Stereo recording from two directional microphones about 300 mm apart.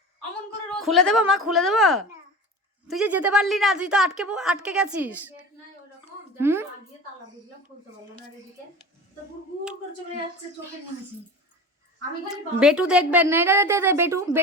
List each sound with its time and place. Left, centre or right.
0.8 s a woman's voice: centre
6.4 s a woman's voice: centre
12.3 s a woman's voice: centre